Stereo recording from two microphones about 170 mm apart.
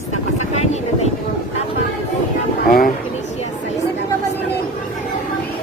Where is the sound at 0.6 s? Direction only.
40° left (ahead or behind).